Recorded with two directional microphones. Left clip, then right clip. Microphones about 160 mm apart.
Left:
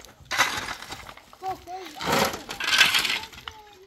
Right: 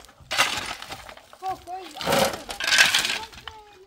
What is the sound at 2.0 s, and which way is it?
Coin, 85° right.